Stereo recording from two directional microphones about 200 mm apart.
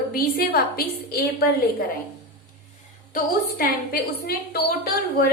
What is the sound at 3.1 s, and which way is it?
A woman's voice, 50° left (ahead or behind).